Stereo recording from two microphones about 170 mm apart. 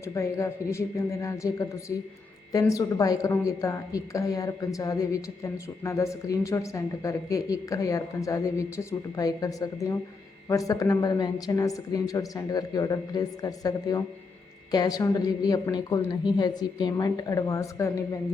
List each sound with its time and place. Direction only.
0.0 s a woman's voice: 15° left (ahead or behind)